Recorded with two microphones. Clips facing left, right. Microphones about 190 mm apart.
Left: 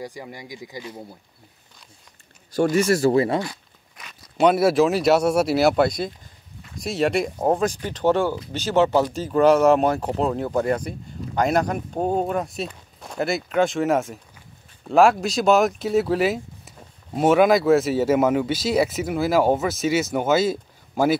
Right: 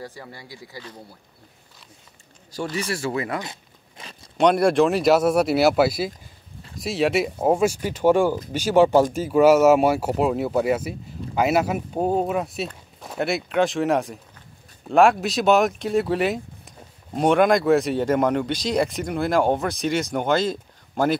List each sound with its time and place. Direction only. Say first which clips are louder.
0.0 s speech: left 3 dB; 15° left (ahead or behind)
2.7 s speech: left 8 dB; 45° left (ahead or behind)
3.4 s a sound: left 3 dB; 30° right (ahead or behind)
4.4 s speech: even; 5° left (ahead or behind)